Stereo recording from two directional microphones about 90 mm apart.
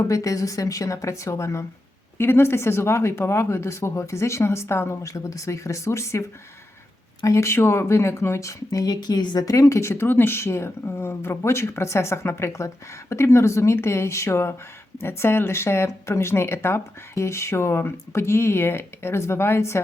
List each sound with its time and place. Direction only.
0.1 s speech: 40° left (ahead or behind)